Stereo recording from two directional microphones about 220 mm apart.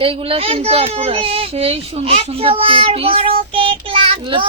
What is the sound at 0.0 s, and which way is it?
A woman's voice, 25° right (ahead or behind).